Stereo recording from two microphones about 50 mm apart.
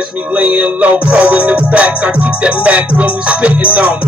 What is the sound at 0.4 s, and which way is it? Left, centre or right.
Music, right.